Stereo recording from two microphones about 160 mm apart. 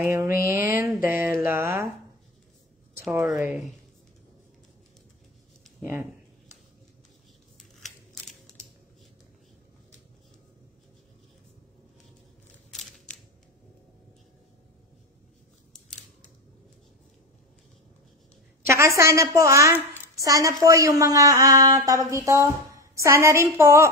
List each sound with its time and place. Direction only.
0.0 s a woman's voice: 15° right (ahead or behind)
3.0 s speech: 10° right (ahead or behind)
3.4 s speech: centre (ahead or behind)
5.8 s speech: 15° right (ahead or behind)
7.5 s scissors: centre (ahead or behind)
12.7 s a sound: centre (ahead or behind)
18.7 s a woman's voice: 15° right (ahead or behind)